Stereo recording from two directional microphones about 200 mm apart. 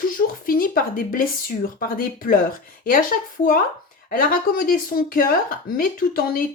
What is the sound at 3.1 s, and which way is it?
Speech, 40° left (ahead or behind).